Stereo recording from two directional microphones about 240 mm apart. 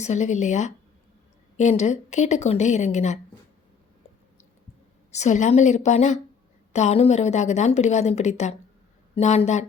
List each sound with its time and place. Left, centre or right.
0.0 s a woman's voice: left
5.1 s a woman's voice: left